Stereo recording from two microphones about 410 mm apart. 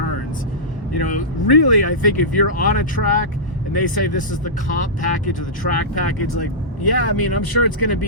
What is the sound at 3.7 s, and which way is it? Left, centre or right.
Speech, left.